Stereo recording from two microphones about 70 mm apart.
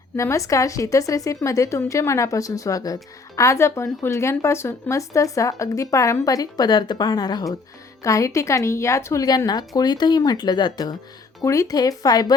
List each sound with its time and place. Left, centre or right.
0.2 s a woman's voice: left
8.0 s a woman's voice: left
9.5 s speech: left
11.4 s speech: left